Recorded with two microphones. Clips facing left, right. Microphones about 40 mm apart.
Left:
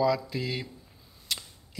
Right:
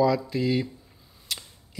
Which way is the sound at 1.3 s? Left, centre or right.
Centre.